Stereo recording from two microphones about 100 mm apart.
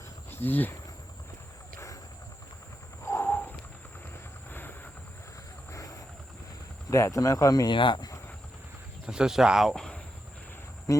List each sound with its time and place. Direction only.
0.3 s speech: 20° left (ahead or behind)
3.0 s wild animals: 25° left (ahead or behind)
4.5 s vehicle: 20° left (ahead or behind)
5.7 s roaring cats: 35° left (ahead or behind)
6.9 s speech: 35° left (ahead or behind); by 8.1 s 50° left (ahead or behind)
9.0 s speech: 5° right (ahead or behind)